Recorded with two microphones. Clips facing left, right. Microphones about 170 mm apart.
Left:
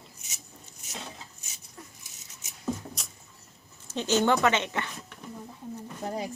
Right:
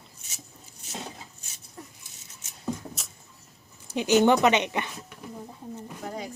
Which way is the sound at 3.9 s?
15° right (ahead or behind).